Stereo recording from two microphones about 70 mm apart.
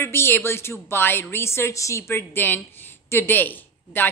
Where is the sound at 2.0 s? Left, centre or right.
Left.